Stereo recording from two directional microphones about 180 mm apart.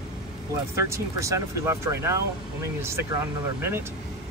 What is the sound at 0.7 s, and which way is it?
Speech, 15° right (ahead or behind).